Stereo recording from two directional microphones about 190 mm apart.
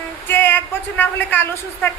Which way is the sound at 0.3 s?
10° left (ahead or behind).